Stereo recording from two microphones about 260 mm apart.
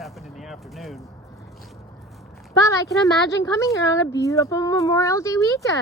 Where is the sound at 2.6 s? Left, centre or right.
Centre.